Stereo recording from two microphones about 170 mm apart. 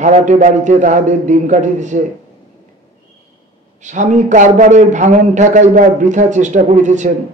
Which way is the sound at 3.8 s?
45° right (ahead or behind).